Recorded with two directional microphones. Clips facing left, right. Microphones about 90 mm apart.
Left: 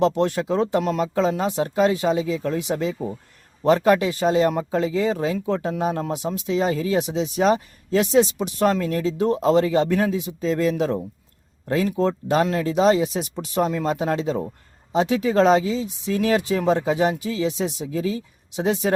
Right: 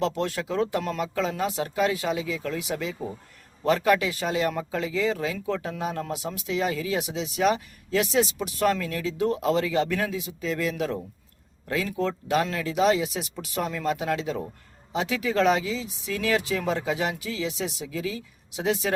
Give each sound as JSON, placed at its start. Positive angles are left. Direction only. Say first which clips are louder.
{"t": 0.0, "sound": "speech", "louder": "left 7 dB", "side_deg": 25}